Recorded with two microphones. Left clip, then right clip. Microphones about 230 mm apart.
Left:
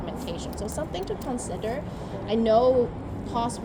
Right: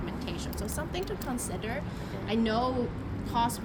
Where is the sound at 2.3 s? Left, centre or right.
Right.